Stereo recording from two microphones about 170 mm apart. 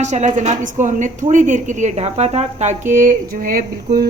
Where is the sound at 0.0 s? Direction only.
45° right (ahead or behind).